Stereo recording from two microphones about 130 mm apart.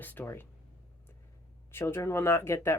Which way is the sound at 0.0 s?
15° left (ahead or behind).